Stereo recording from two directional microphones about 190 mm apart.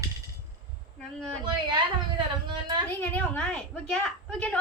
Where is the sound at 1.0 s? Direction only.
5° left (ahead or behind).